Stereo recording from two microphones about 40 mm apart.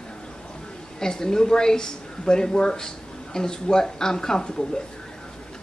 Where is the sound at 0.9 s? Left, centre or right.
Centre.